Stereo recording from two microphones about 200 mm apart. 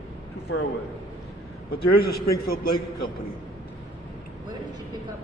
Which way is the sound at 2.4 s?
45° left (ahead or behind).